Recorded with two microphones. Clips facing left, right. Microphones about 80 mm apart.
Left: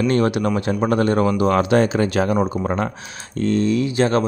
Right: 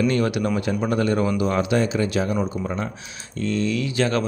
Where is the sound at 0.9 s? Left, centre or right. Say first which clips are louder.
Left 4 dB; left.